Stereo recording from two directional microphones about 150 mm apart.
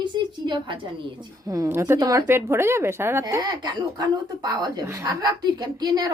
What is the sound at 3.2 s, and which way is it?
A woman's voice, 25° right (ahead or behind).